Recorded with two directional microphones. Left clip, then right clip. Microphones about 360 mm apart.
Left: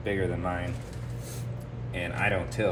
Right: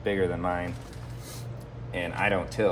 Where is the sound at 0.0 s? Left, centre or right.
Centre.